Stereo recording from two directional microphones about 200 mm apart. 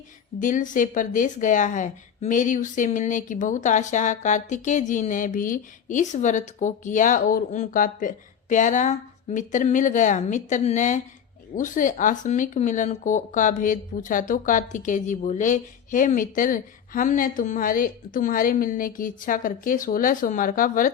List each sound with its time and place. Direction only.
0.3 s speech: 40° left (ahead or behind)